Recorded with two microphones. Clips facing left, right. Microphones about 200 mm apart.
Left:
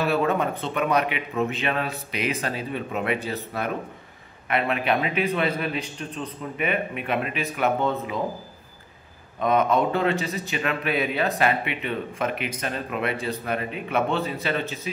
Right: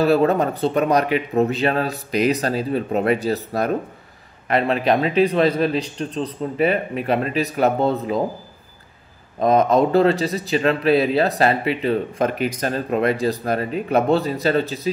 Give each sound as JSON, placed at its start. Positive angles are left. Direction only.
{"t": 0.0, "sound": "speech", "side_deg": -35}
{"t": 9.4, "sound": "speech", "side_deg": -35}